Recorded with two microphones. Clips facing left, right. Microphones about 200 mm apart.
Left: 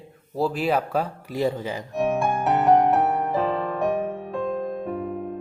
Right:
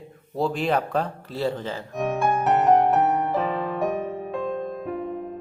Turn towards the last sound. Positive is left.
turn(degrees=0)  # may be behind; listen again after turning